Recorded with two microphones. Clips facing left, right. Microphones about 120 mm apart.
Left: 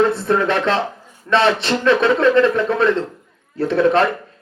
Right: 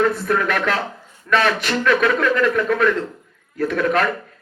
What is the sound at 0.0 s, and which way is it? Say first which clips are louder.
A man's voice: left 3 dB; 25° left (ahead or behind).